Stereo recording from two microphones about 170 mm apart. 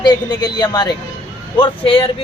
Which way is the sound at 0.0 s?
25° left (ahead or behind).